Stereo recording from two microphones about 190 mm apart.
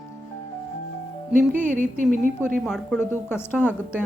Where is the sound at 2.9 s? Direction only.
10° left (ahead or behind).